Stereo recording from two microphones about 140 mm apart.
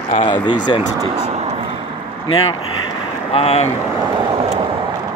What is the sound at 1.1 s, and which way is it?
Vehicle, 50° right (ahead or behind).